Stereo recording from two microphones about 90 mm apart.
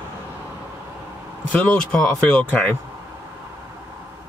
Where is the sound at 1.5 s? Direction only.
10° left (ahead or behind).